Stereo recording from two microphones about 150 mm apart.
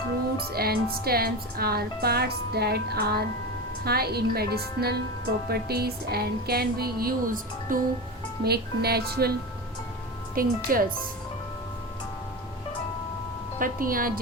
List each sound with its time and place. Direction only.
0.5 s a woman's voice: 90° right; by 7.8 s 65° right (ahead or behind)
8.4 s a woman's voice: 90° right
10.3 s speech: 70° right (ahead or behind)
13.6 s speech: 70° right (ahead or behind)